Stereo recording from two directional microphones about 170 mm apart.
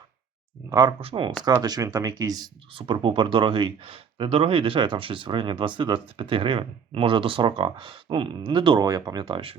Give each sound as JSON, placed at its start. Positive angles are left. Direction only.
{"t": 0.7, "sound": "speech", "side_deg": -25}